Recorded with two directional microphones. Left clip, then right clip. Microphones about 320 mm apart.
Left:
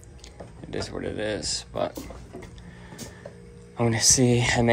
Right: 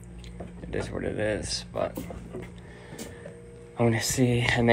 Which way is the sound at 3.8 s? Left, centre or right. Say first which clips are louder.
Left 4 dB; centre.